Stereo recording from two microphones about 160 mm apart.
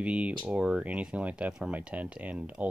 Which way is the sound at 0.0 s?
10° right (ahead or behind).